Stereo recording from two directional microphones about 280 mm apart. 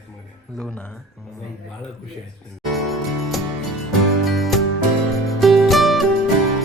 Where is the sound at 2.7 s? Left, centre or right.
Centre.